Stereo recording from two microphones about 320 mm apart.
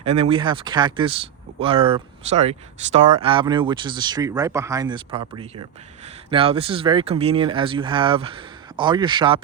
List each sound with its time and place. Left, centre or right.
0.0 s speech: centre